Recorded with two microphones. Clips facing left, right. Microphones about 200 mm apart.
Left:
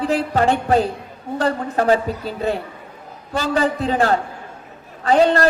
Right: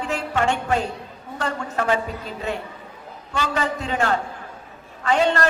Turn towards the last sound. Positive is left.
turn(degrees=35)  # may be behind; listen again after turning